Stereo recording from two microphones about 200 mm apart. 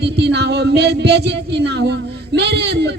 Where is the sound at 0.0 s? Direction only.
55° right (ahead or behind).